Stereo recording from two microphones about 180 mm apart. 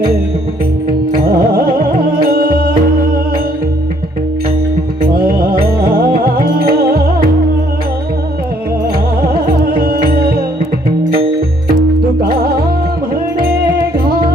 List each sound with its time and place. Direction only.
1.1 s music: 55° right (ahead or behind)
5.9 s music: 55° right (ahead or behind)
9.3 s music: 55° right (ahead or behind)